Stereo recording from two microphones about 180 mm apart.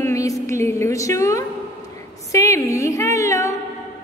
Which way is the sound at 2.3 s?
15° left (ahead or behind).